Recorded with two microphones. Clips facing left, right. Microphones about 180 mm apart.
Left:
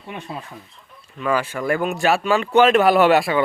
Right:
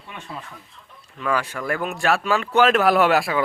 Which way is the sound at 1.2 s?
5° left (ahead or behind).